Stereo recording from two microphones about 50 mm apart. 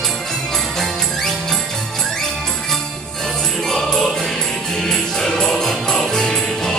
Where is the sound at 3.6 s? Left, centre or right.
Centre.